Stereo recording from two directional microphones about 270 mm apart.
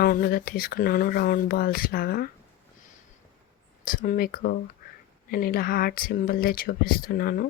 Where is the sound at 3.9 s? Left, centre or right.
Left.